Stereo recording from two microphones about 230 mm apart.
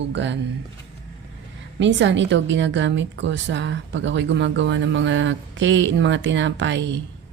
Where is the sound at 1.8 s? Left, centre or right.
Right.